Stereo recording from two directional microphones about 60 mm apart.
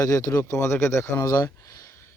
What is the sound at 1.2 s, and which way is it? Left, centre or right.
Speech, left.